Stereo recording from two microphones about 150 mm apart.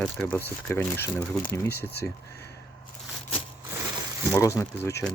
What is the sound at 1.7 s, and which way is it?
Speech, 90° left.